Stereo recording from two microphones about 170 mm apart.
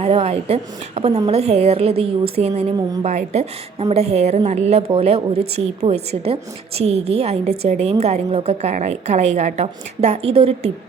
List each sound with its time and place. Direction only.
0.0 s a woman's voice: 35° right (ahead or behind)